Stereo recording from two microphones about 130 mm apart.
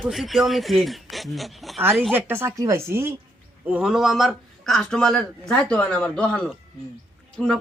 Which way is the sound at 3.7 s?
10° right (ahead or behind).